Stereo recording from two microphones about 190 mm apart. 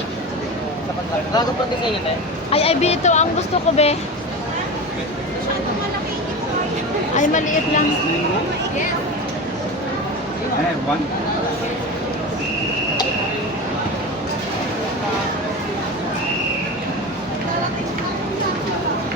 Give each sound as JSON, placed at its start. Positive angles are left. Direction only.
{"t": 2.5, "sound": "speech", "side_deg": 30}
{"t": 7.2, "sound": "speech", "side_deg": 40}